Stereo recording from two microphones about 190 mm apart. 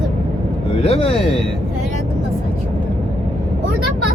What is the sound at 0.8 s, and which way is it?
Speech, 30° left (ahead or behind).